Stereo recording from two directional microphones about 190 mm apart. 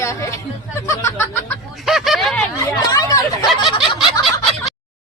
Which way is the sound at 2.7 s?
20° left (ahead or behind).